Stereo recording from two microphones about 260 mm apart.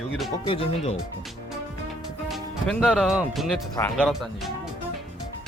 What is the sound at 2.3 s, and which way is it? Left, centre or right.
Speech, centre.